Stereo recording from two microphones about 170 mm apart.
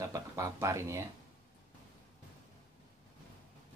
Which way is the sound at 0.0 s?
20° right (ahead or behind).